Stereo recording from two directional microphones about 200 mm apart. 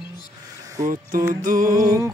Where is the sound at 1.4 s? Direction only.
45° right (ahead or behind).